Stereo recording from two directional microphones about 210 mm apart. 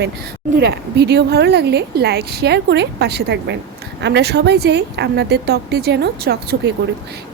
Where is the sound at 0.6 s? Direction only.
50° right (ahead or behind).